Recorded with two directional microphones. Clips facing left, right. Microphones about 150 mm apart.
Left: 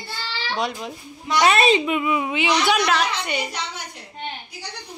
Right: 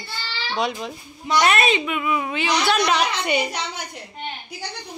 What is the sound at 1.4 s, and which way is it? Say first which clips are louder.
A child's voice: left 4 dB; 30° left (ahead or behind).